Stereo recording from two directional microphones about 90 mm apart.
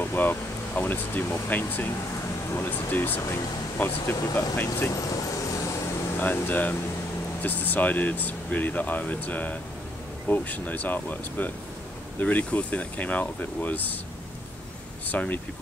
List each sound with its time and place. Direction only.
0.0 s speech: 20° left (ahead or behind)
6.1 s speech: 20° left (ahead or behind)
15.0 s speech: 20° left (ahead or behind)